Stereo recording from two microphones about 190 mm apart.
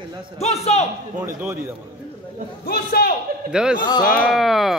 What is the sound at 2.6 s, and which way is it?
Speech, 55° left (ahead or behind).